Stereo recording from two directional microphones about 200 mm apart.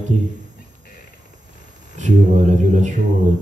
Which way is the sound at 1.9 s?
35° right (ahead or behind).